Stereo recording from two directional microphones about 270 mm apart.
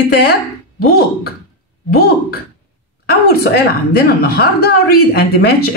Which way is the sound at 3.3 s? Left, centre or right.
Left.